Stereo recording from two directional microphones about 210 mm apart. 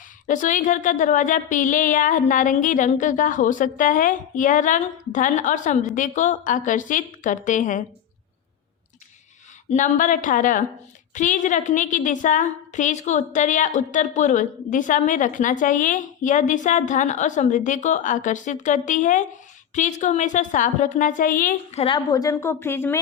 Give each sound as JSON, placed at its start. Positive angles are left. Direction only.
{"t": 0.3, "sound": "a woman's voice", "side_deg": 40}
{"t": 9.6, "sound": "a woman's voice", "side_deg": 35}